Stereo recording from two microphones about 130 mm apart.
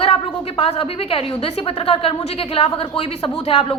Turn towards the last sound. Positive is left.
turn(degrees=45)  # may be behind; listen again after turning